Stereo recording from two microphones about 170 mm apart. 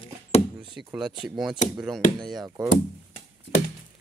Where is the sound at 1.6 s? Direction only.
45° left (ahead or behind).